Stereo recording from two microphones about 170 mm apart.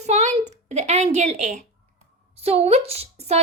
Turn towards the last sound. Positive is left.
turn(degrees=-40)  # may be behind; listen again after turning